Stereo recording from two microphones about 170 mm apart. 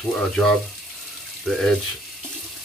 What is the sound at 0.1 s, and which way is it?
Speech, centre (ahead or behind).